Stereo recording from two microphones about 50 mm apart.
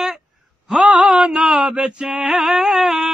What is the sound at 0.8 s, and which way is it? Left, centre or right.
Mantra, right.